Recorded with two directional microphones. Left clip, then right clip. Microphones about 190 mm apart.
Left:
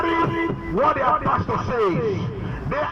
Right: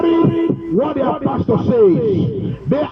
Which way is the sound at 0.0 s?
45° right (ahead or behind).